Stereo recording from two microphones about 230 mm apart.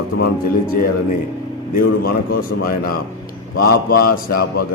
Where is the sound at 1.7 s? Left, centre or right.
Left.